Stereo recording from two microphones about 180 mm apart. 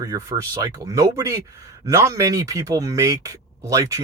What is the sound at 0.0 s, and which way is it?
Speech, 20° right (ahead or behind).